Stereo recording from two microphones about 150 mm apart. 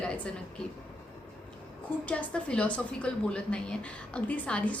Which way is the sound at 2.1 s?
10° left (ahead or behind).